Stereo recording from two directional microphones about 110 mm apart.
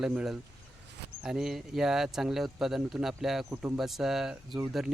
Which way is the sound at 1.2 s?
5° right (ahead or behind).